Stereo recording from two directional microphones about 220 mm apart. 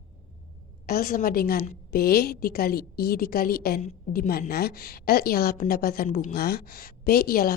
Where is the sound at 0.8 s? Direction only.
45° left (ahead or behind).